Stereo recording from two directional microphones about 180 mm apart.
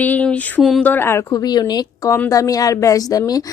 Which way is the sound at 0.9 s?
15° left (ahead or behind).